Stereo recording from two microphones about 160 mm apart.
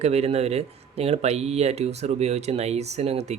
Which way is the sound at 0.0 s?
40° right (ahead or behind).